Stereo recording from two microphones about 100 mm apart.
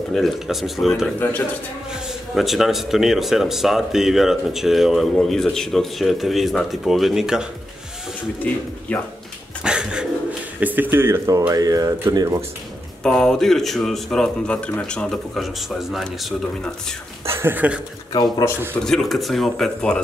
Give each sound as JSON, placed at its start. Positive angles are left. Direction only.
{"t": 0.1, "sound": "speech", "side_deg": 0}
{"t": 8.5, "sound": "speech", "side_deg": 15}
{"t": 9.6, "sound": "dog", "side_deg": -10}
{"t": 10.6, "sound": "speech", "side_deg": -20}
{"t": 13.0, "sound": "speech", "side_deg": 5}
{"t": 17.3, "sound": "speech", "side_deg": -25}
{"t": 18.7, "sound": "speech", "side_deg": 5}